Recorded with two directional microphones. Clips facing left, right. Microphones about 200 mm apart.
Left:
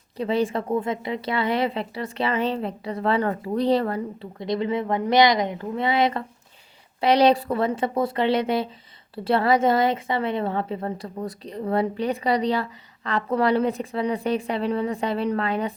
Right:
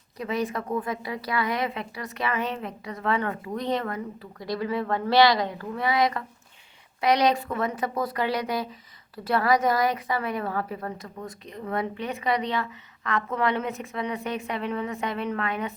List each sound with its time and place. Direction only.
0.2 s a woman's voice: 30° left (ahead or behind)